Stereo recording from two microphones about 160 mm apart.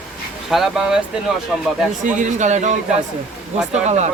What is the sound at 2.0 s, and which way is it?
A man's voice, 50° right (ahead or behind).